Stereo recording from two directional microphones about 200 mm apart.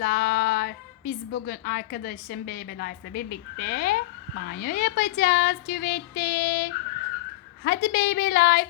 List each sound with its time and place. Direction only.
0.0 s a woman's voice: 50° left (ahead or behind)